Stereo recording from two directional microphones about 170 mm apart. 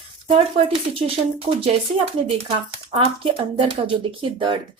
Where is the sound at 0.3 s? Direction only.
35° right (ahead or behind).